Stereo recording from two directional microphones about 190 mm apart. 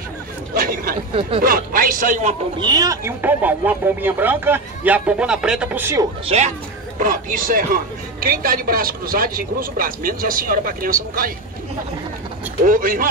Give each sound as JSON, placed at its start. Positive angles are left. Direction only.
{"t": 0.6, "sound": "a man's voice", "side_deg": -50}
{"t": 2.6, "sound": "speech", "side_deg": -20}
{"t": 6.2, "sound": "a woman's voice", "side_deg": -35}
{"t": 7.0, "sound": "a man's voice", "side_deg": -45}
{"t": 12.6, "sound": "a man's voice", "side_deg": -45}